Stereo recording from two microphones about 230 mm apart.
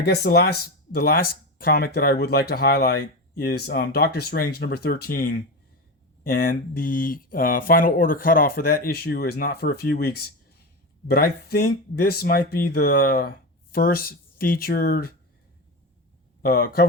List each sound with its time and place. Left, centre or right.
0.0 s speech: left
16.4 s speech: left